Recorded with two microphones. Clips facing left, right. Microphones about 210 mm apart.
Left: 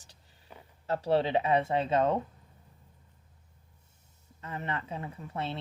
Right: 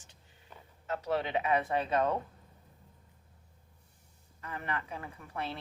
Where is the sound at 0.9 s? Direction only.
30° left (ahead or behind).